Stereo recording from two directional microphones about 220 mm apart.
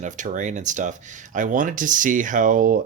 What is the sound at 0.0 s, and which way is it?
Speech, 35° right (ahead or behind).